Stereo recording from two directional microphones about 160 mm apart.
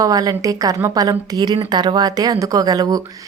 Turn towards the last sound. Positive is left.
turn(degrees=-25)  # may be behind; listen again after turning